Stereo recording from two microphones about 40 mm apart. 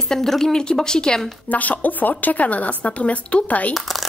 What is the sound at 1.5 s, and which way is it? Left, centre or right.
A woman's voice, left.